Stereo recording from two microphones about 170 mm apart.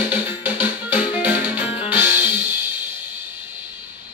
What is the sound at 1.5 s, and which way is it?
Music, 35° left (ahead or behind).